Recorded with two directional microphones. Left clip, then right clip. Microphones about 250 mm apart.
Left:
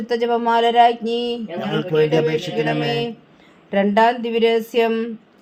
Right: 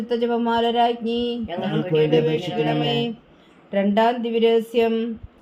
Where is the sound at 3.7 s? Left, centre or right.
Left.